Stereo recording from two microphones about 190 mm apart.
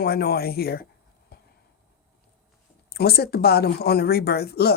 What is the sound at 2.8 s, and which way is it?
Speech, 55° left (ahead or behind).